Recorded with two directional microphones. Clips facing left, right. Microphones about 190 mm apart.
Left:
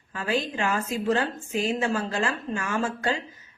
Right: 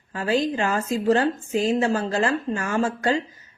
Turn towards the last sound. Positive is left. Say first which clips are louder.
# right 5 dB
turn(degrees=-40)  # may be behind; listen again after turning